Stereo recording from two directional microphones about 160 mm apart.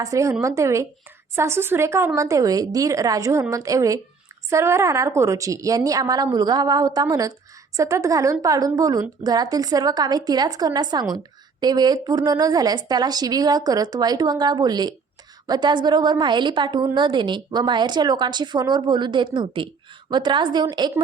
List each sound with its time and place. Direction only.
0.0 s a woman's voice: 20° right (ahead or behind)